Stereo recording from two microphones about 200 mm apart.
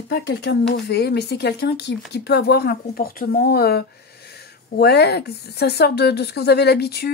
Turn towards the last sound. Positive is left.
turn(degrees=55)  # may be behind; listen again after turning